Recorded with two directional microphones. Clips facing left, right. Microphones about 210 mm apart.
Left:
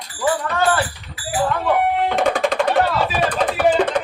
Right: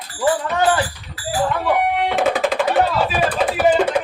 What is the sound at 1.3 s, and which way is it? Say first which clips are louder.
A man's voice: even; centre (ahead or behind).